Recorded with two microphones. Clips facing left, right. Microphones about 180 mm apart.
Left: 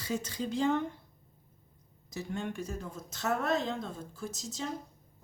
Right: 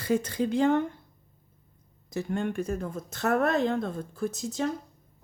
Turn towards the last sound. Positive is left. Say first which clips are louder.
# right 9 dB
turn(degrees=-60)  # may be behind; listen again after turning